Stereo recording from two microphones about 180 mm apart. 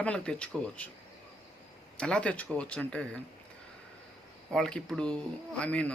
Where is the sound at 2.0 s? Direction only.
5° left (ahead or behind).